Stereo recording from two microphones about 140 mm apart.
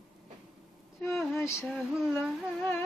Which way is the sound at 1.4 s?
20° left (ahead or behind).